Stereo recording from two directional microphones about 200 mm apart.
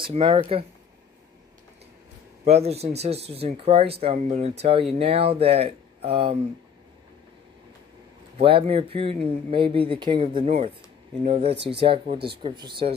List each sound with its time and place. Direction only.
0.0 s speech: 30° right (ahead or behind)
2.4 s speech: 30° right (ahead or behind)
8.4 s speech: 25° right (ahead or behind)